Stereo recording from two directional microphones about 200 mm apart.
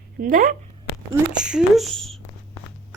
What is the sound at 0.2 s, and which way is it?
Speech, 45° right (ahead or behind).